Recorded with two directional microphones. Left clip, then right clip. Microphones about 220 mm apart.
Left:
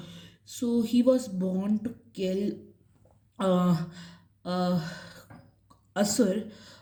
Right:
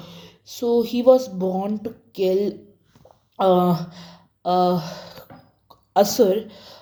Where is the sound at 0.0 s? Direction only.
15° left (ahead or behind).